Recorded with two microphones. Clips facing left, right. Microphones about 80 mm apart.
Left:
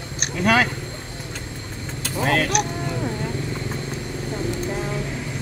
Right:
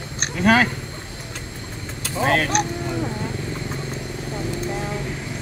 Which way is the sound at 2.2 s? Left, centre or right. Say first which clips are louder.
Right 1 dB; right.